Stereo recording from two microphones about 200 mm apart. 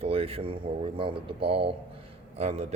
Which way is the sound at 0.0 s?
30° right (ahead or behind).